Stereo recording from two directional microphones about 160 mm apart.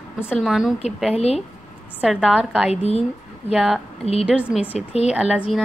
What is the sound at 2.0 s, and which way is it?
A woman's voice, 5° right (ahead or behind).